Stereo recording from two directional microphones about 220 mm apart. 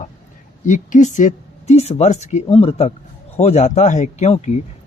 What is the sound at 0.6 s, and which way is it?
A man's voice, 35° left (ahead or behind).